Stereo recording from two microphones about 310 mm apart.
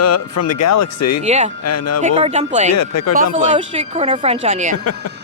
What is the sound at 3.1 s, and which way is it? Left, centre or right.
A woman's voice, right.